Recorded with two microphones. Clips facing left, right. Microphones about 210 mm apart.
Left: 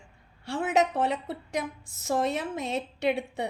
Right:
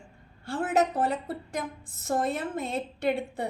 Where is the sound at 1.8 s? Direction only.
75° left (ahead or behind).